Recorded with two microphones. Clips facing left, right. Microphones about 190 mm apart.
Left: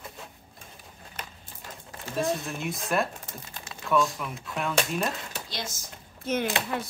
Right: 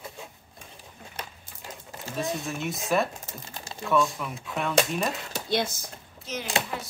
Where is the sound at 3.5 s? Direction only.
30° right (ahead or behind).